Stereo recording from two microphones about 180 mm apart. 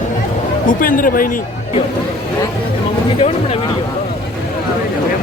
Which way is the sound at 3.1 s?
35° left (ahead or behind).